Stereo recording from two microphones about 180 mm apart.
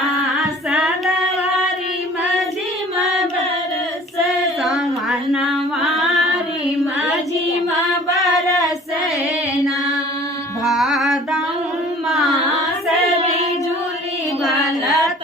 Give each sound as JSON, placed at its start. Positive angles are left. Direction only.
{"t": 0.3, "sound": "female singing", "side_deg": 0}
{"t": 4.6, "sound": "female singing", "side_deg": 0}
{"t": 8.4, "sound": "female singing", "side_deg": 20}
{"t": 10.7, "sound": "music", "side_deg": 0}
{"t": 12.0, "sound": "carnatic music", "side_deg": 0}
{"t": 14.4, "sound": "a sound", "side_deg": 0}